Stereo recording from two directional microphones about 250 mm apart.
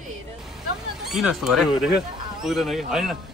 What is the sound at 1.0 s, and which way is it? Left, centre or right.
A man's voice, centre.